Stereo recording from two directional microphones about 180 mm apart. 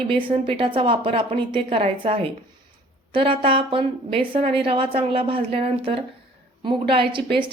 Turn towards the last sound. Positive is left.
turn(degrees=-30)  # may be behind; listen again after turning